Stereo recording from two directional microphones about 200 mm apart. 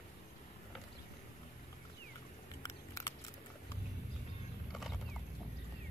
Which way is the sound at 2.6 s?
15° left (ahead or behind).